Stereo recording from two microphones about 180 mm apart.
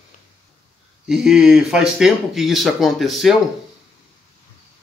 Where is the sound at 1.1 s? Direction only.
Centre (ahead or behind).